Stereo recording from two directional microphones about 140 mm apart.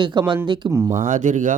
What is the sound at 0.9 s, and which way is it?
Speech, 60° right (ahead or behind).